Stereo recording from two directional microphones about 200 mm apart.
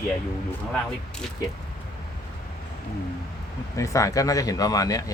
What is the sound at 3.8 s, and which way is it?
Speech, 15° left (ahead or behind).